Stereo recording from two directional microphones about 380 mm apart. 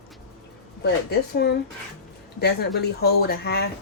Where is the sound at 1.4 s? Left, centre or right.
Left.